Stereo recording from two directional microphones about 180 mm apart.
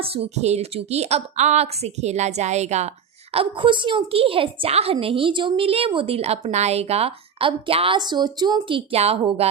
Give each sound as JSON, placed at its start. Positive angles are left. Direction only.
{"t": 0.0, "sound": "a woman's voice", "side_deg": -35}
{"t": 3.3, "sound": "a woman's voice", "side_deg": -25}